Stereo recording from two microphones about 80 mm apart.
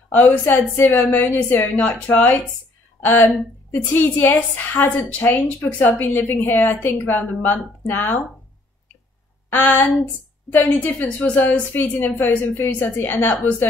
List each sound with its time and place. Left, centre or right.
0.1 s a woman's voice: left
9.5 s a woman's voice: left